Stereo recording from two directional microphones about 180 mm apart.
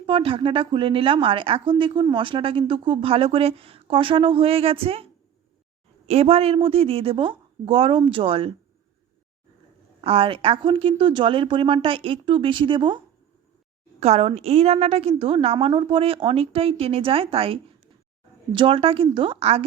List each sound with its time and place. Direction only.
0.0 s a woman's voice: 30° right (ahead or behind)
6.1 s a woman's voice: 35° right (ahead or behind)
10.0 s a woman's voice: 30° right (ahead or behind)
14.0 s a woman's voice: 35° right (ahead or behind)